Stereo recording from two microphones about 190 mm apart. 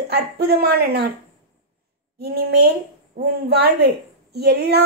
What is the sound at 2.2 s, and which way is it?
A woman's voice, 55° right (ahead or behind).